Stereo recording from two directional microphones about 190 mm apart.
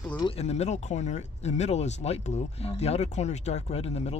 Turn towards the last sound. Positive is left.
turn(degrees=30)  # may be behind; listen again after turning